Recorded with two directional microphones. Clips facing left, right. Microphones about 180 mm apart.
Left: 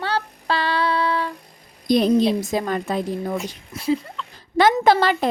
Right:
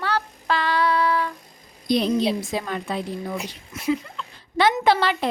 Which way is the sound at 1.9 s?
45° left (ahead or behind).